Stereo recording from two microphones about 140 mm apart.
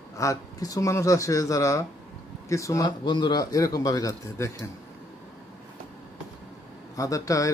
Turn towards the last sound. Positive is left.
turn(degrees=25)  # may be behind; listen again after turning